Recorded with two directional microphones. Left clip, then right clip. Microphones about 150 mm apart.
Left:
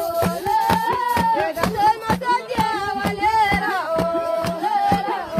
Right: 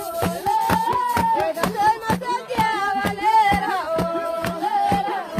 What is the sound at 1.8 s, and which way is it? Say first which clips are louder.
Music: left 3 dB; 30° left (ahead or behind).